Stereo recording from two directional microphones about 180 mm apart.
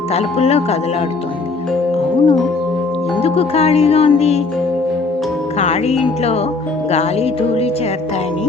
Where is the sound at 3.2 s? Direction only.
35° left (ahead or behind).